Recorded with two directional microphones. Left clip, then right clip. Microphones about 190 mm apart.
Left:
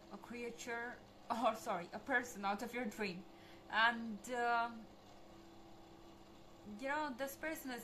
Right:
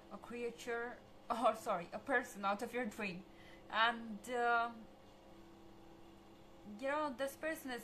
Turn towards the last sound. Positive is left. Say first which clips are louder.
# right 2 dB
turn(degrees=-15)  # may be behind; listen again after turning